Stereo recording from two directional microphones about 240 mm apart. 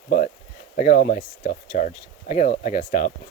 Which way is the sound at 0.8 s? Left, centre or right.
Left.